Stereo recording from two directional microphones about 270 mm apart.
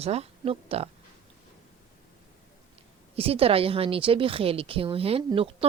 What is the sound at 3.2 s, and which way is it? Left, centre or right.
A woman's voice, right.